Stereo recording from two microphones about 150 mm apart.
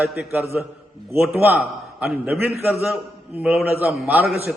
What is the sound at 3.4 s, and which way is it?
Speech, 10° right (ahead or behind).